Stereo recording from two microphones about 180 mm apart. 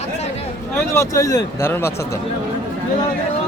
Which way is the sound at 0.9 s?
15° left (ahead or behind).